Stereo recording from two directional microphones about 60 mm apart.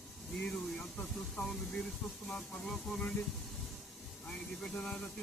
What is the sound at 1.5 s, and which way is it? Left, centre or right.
Speech, centre.